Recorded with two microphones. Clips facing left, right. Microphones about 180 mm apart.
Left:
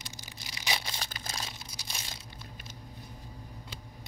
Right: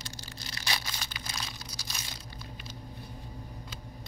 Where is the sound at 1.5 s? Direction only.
20° left (ahead or behind).